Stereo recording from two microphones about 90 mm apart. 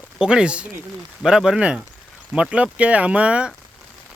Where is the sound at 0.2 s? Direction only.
10° right (ahead or behind).